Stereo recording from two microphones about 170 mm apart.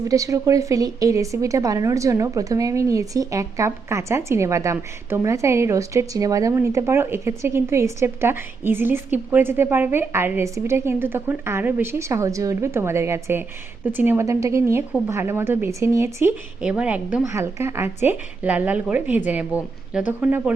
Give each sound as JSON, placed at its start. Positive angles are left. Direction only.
{"t": 0.0, "sound": "a woman's voice", "side_deg": -20}
{"t": 16.6, "sound": "a woman's voice", "side_deg": -5}